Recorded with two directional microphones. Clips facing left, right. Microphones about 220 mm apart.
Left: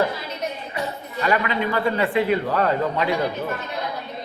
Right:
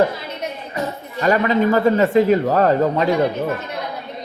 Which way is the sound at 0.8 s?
40° right (ahead or behind).